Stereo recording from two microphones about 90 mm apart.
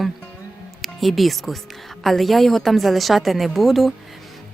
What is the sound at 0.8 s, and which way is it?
A woman's voice, centre (ahead or behind).